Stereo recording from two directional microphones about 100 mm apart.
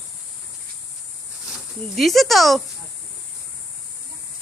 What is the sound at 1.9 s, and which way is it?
Speech, centre (ahead or behind).